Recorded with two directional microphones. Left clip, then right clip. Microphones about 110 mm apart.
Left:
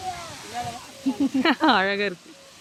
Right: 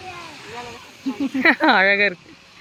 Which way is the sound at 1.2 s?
Centre (ahead or behind).